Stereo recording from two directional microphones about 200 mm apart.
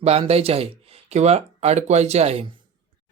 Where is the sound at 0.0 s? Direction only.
30° right (ahead or behind).